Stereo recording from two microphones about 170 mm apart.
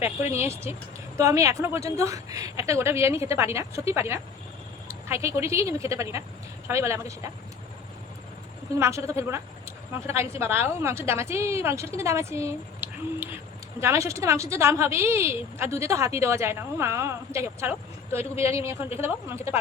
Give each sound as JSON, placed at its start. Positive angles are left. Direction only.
{"t": 0.3, "sound": "a woman's voice", "side_deg": -15}
{"t": 8.8, "sound": "a woman's voice", "side_deg": -15}